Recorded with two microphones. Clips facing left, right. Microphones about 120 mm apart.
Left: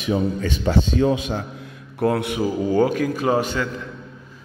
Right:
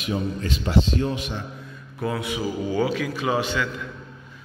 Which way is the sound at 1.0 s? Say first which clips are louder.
Left 7 dB; 90° left.